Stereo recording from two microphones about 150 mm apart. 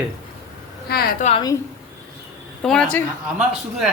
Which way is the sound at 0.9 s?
90° left.